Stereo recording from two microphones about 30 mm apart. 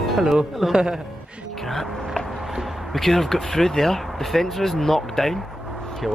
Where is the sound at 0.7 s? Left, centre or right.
Right.